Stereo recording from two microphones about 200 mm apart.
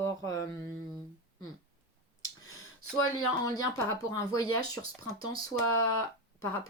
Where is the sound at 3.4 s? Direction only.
15° left (ahead or behind).